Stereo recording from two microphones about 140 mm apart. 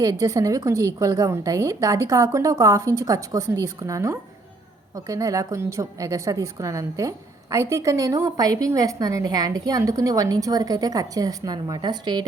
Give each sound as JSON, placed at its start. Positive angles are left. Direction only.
{"t": 0.0, "sound": "a woman's voice", "side_deg": -25}